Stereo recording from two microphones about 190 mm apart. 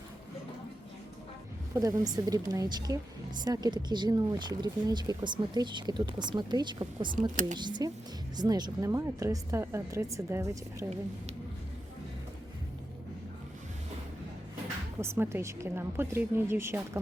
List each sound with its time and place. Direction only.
1.7 s a woman's voice: 15° right (ahead or behind)
7.2 s speech: 40° right (ahead or behind)
7.6 s speech: 25° right (ahead or behind)
15.0 s speech: 15° right (ahead or behind)